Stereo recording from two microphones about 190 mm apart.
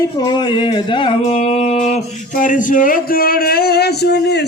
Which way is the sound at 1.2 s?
30° left (ahead or behind).